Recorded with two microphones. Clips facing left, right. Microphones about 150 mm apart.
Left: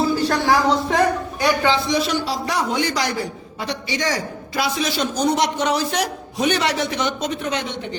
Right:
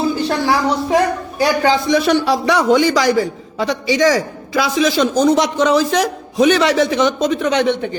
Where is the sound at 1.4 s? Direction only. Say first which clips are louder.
Right 5 dB; 40° right (ahead or behind).